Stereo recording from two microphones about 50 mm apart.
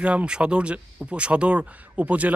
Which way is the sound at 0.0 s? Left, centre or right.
Right.